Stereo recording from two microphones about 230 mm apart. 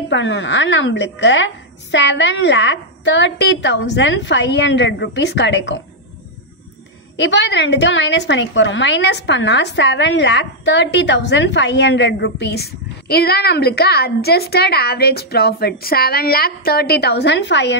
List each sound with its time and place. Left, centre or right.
0.1 s a woman's voice: left
7.2 s a woman's voice: left